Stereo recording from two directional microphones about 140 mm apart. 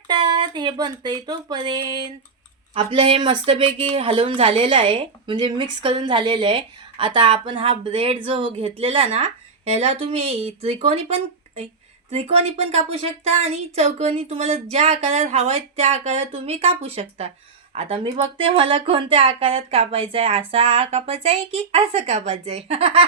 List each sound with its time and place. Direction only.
0.1 s a woman's voice: 35° right (ahead or behind)